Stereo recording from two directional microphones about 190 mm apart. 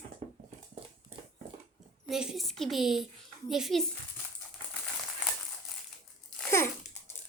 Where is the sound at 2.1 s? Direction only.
Centre (ahead or behind).